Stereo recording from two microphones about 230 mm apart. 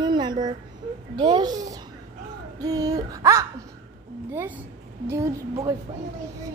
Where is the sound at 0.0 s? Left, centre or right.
Centre.